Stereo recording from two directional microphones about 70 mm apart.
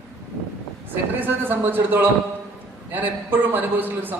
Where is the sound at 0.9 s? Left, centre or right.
Right.